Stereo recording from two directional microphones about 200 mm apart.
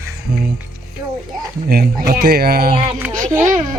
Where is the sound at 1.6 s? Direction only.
50° right (ahead or behind).